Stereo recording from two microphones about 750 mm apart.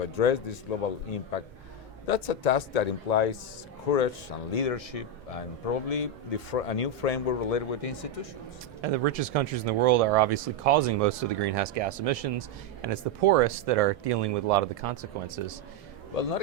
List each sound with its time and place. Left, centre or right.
0.0 s speech: left
8.8 s speech: right